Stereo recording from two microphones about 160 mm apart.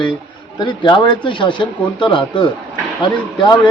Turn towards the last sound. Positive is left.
turn(degrees=30)  # may be behind; listen again after turning